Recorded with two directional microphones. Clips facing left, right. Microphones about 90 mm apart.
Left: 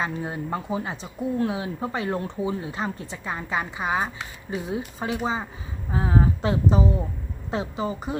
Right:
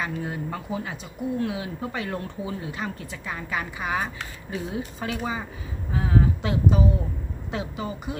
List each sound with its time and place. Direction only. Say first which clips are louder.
0.0 s a woman's voice: left 1 dB; 25° left (ahead or behind)